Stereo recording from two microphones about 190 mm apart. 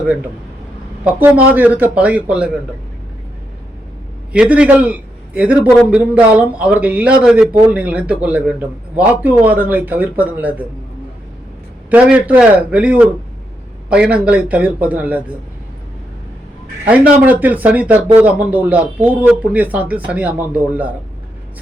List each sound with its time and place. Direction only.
1.5 s speech: 10° right (ahead or behind)
4.3 s a man's voice: 5° right (ahead or behind)
11.9 s speech: 5° right (ahead or behind)
16.8 s speech: 10° right (ahead or behind)